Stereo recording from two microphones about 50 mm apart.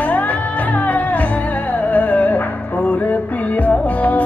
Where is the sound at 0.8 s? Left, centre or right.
Left.